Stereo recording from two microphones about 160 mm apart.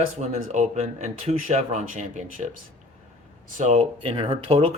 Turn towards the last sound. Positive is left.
turn(degrees=-40)  # may be behind; listen again after turning